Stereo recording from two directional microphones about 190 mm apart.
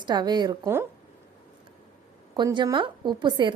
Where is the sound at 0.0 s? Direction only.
20° right (ahead or behind).